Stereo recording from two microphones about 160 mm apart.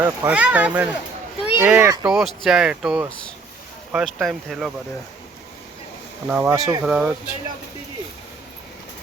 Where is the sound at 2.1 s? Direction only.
Centre (ahead or behind).